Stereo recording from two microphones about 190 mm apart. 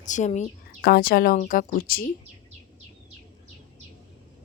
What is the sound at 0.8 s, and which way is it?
Speech, 55° left (ahead or behind).